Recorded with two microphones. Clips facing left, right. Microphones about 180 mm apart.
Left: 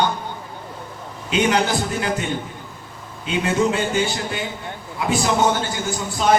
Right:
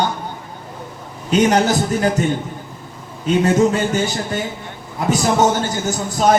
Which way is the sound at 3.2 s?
40° right (ahead or behind).